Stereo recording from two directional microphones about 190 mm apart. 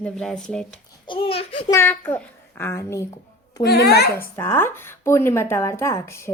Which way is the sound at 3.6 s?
60° left (ahead or behind).